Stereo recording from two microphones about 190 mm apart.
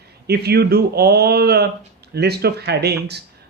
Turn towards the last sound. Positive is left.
turn(degrees=-60)  # may be behind; listen again after turning